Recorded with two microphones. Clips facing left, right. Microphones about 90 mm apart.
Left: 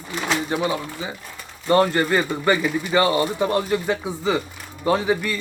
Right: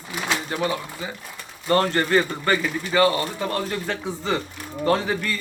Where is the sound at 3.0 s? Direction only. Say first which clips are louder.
Left 1 dB; 20° left (ahead or behind).